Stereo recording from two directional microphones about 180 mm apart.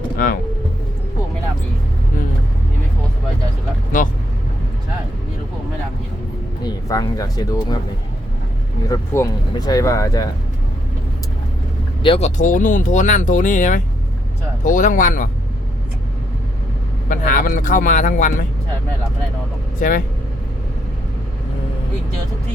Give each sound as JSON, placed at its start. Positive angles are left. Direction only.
{"t": 0.2, "sound": "speech", "side_deg": 50}
{"t": 6.6, "sound": "speech", "side_deg": 20}
{"t": 8.9, "sound": "speech", "side_deg": 20}
{"t": 12.0, "sound": "speech", "side_deg": 30}
{"t": 12.4, "sound": "speech", "side_deg": 45}
{"t": 17.1, "sound": "speech", "side_deg": 50}
{"t": 19.8, "sound": "speech", "side_deg": 45}